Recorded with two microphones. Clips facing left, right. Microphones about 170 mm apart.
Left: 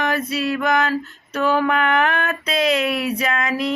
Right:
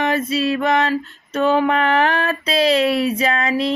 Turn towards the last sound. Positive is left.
turn(degrees=-30)  # may be behind; listen again after turning